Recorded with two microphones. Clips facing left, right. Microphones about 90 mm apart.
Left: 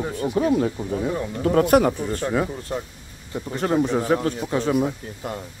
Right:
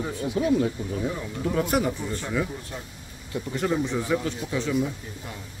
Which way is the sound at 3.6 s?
50° left (ahead or behind).